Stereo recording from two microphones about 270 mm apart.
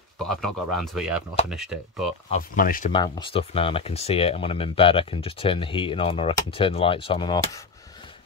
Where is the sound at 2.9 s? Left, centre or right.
Centre.